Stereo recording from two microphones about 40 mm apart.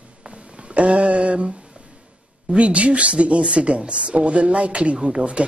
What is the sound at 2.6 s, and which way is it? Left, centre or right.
Speech, right.